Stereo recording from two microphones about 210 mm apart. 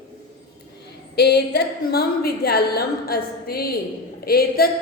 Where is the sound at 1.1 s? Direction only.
50° left (ahead or behind).